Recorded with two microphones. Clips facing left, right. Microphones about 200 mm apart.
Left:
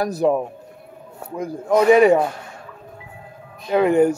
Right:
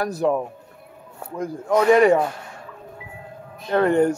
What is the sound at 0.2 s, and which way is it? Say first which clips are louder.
Speech: left 3 dB; 10° left (ahead or behind).